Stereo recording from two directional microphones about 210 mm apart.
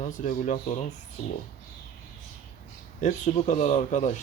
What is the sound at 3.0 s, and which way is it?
Speech, 35° left (ahead or behind).